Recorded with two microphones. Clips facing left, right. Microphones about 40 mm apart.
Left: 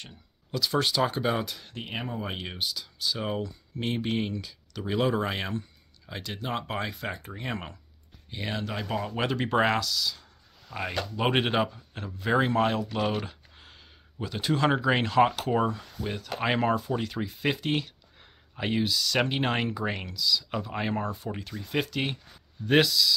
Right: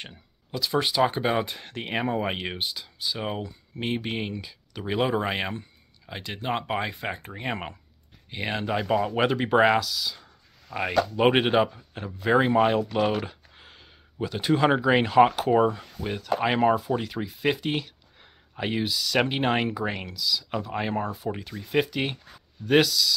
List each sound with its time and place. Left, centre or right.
0.5 s speech: centre
1.8 s speech: right
2.2 s speech: right
3.0 s speech: centre
16.2 s speech: centre
22.7 s speech: centre